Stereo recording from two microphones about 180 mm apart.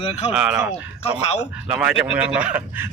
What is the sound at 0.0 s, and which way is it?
Speech, 30° left (ahead or behind).